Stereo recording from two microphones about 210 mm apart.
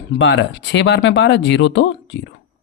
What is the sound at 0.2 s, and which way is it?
Speech, 60° left (ahead or behind).